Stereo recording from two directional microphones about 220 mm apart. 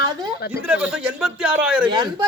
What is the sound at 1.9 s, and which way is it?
Speech, 20° right (ahead or behind).